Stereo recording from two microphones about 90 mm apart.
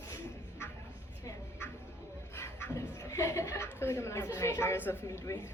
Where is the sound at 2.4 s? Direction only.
30° left (ahead or behind).